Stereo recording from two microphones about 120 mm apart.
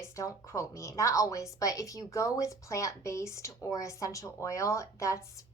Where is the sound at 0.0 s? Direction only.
25° left (ahead or behind).